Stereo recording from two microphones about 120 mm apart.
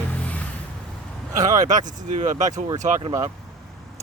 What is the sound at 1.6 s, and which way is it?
Speech, 90° right.